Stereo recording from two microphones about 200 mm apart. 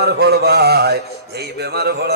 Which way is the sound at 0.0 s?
55° right (ahead or behind).